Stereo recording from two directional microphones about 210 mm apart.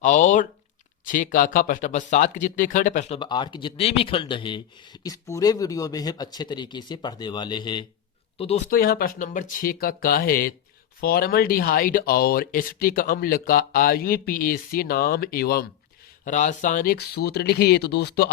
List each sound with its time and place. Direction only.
0.0 s speech: 35° left (ahead or behind)
3.2 s a man's voice: 20° left (ahead or behind)
8.7 s speech: 45° left (ahead or behind)